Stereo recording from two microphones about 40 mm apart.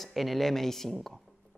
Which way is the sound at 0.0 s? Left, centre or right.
Centre.